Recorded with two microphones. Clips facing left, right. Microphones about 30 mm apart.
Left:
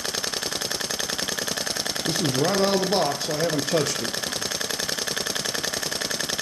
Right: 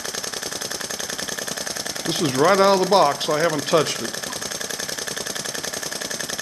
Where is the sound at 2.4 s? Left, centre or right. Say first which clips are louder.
Right 8 dB; right.